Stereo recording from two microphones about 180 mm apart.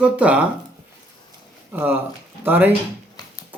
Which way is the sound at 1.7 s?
10° right (ahead or behind).